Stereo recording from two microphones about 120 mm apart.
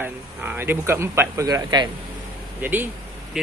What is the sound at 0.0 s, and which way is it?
Speech, 15° right (ahead or behind).